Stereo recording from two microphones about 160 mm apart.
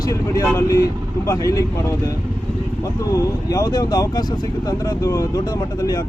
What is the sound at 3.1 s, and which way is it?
Speech, 20° left (ahead or behind).